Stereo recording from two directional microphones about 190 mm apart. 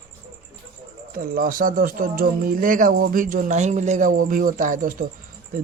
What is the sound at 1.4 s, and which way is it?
Speech, 50° right (ahead or behind).